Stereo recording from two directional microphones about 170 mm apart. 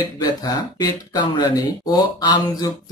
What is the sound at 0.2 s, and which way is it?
Speech, 20° left (ahead or behind).